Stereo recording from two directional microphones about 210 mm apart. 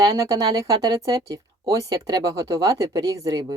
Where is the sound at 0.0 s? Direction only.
15° right (ahead or behind).